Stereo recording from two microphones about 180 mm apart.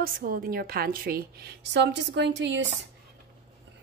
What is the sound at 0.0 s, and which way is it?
A woman's voice, 50° right (ahead or behind).